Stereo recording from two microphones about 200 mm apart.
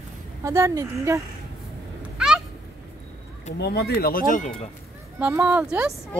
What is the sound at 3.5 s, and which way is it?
Speech, 55° left (ahead or behind).